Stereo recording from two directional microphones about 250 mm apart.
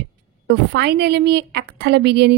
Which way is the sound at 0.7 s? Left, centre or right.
Right.